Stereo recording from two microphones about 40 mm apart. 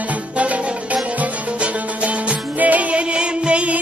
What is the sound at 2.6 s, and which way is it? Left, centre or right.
Music, right.